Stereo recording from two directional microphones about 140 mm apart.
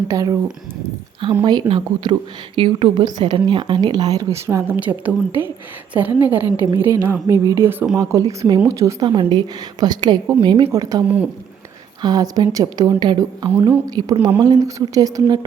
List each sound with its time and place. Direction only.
0.1 s a woman's voice: 25° right (ahead or behind)
1.6 s a woman's voice: 40° right (ahead or behind); by 9.0 s 25° right (ahead or behind)
9.0 s a woman's voice: 35° right (ahead or behind)
11.0 s a woman's voice: 10° right (ahead or behind)
12.0 s a woman's voice: 25° right (ahead or behind)
13.5 s a woman's voice: 15° right (ahead or behind)
13.9 s a woman's voice: 30° right (ahead or behind)